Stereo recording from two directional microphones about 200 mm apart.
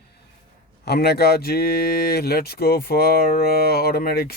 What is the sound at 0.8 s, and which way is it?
Speech, 55° left (ahead or behind).